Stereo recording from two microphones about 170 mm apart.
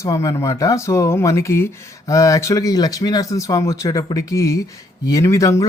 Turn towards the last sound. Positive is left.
turn(degrees=20)  # may be behind; listen again after turning